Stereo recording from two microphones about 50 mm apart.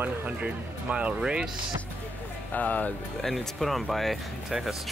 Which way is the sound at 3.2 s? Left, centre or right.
Centre.